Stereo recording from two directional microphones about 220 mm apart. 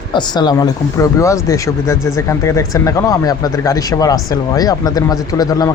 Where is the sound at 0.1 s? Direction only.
20° left (ahead or behind).